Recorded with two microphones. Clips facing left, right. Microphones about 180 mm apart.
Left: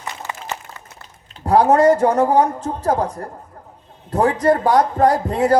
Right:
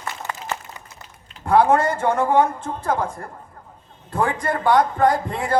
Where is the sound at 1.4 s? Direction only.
40° left (ahead or behind).